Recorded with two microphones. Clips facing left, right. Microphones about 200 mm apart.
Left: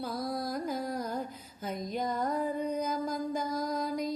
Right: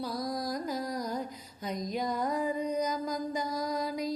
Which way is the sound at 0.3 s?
5° left (ahead or behind).